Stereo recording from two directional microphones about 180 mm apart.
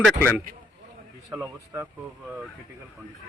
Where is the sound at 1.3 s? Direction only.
10° right (ahead or behind).